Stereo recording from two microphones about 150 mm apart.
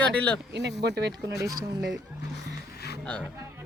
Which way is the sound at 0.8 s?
90° right.